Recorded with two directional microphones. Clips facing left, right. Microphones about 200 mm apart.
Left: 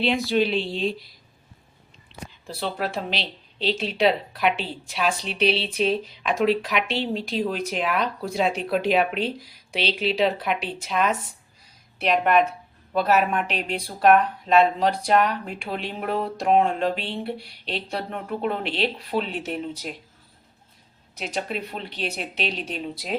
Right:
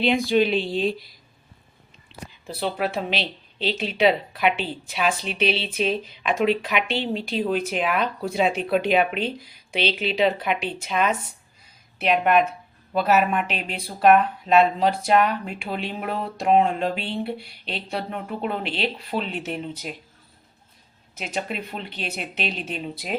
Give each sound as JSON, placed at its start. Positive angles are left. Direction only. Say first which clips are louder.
{"t": 0.0, "sound": "speech", "louder": "right 2 dB", "side_deg": 0}
{"t": 2.1, "sound": "a sound", "louder": "even", "side_deg": -5}
{"t": 2.5, "sound": "speech", "louder": "right 2 dB", "side_deg": -5}
{"t": 21.2, "sound": "speech", "louder": "even", "side_deg": 0}